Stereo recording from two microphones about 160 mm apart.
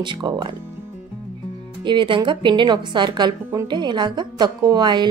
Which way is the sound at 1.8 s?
30° right (ahead or behind).